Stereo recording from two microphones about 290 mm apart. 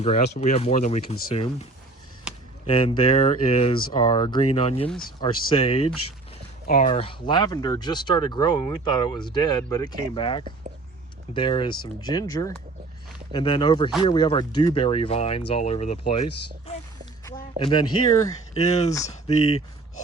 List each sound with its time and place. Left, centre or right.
0.3 s speech: left
2.3 s a sound: centre
2.6 s speech: centre
17.2 s speech: centre